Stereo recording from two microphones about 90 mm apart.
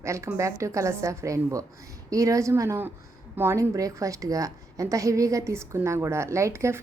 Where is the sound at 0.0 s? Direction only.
30° right (ahead or behind).